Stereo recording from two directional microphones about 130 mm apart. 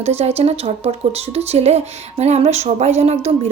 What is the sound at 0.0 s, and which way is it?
A woman's voice, 55° right (ahead or behind).